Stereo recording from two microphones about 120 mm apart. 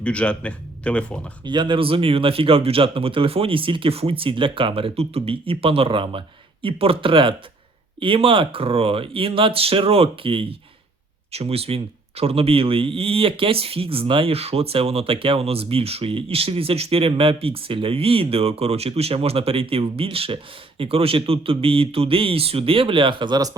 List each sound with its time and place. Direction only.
0.0 s speech: 10° left (ahead or behind)
1.5 s speech: 40° right (ahead or behind)